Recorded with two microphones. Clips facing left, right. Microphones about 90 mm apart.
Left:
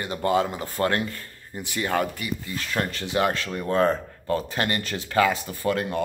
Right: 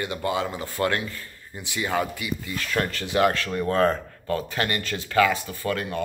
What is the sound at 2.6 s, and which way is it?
Speech, 25° left (ahead or behind).